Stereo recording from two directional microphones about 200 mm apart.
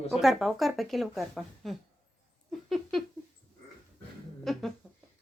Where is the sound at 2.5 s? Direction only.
Centre (ahead or behind).